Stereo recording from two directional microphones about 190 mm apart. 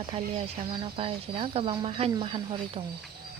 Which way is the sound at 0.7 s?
30° right (ahead or behind).